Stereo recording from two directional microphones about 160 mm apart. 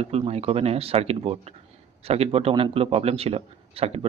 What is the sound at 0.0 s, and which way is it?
Speech, 40° right (ahead or behind).